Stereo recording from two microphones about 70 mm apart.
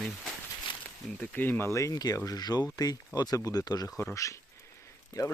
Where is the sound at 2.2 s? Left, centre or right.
Left.